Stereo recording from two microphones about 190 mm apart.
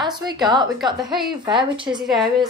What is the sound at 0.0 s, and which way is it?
A woman's voice, 20° right (ahead or behind).